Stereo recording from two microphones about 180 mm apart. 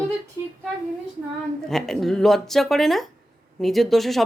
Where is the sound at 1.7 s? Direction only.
Centre (ahead or behind).